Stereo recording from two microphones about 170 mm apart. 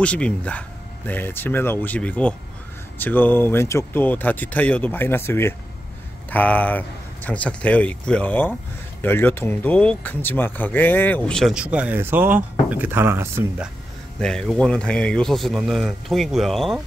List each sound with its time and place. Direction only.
0.0 s speech: 5° left (ahead or behind); by 13.7 s 15° right (ahead or behind)
14.2 s speech: 5° left (ahead or behind)